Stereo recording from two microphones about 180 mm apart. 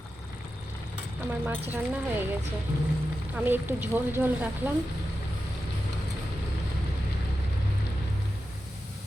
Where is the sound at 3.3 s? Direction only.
10° right (ahead or behind).